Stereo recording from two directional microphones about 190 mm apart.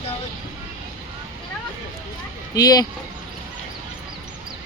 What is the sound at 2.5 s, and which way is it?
Speech, 20° left (ahead or behind).